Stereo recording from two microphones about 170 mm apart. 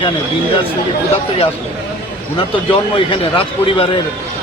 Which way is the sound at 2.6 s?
30° left (ahead or behind).